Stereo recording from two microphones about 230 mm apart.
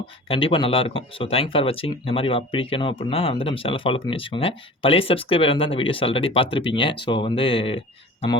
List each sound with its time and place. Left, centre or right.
0.3 s speech: left